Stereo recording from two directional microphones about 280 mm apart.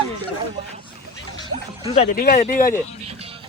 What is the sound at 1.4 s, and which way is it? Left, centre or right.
Speech, left.